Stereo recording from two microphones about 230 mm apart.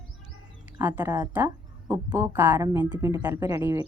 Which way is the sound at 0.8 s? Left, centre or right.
Centre.